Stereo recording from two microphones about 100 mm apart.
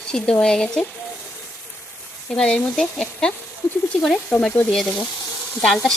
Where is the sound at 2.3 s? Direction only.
10° left (ahead or behind).